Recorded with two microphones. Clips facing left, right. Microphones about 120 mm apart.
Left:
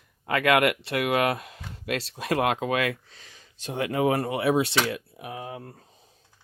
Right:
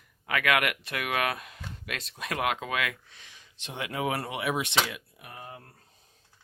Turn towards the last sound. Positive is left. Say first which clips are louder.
# left 8 dB
turn(degrees=90)